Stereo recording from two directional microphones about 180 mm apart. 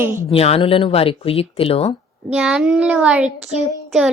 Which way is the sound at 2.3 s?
5° right (ahead or behind).